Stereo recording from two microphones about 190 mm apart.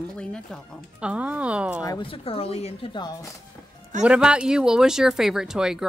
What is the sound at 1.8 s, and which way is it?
Speech, 25° left (ahead or behind).